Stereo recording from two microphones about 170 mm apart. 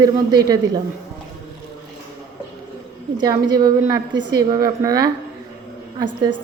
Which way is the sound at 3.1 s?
25° right (ahead or behind).